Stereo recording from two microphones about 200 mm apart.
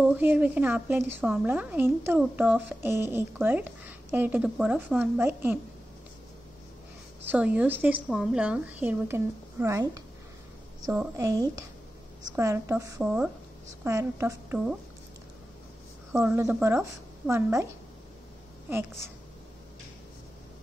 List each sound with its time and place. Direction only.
0.0 s a woman's voice: 10° right (ahead or behind)
7.2 s a woman's voice: 5° right (ahead or behind)
16.1 s a woman's voice: 10° right (ahead or behind)